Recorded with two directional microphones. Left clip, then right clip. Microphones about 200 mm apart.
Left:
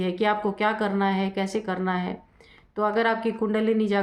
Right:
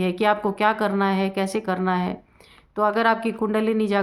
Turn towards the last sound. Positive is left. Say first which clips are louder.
# right 2 dB
turn(degrees=-30)  # may be behind; listen again after turning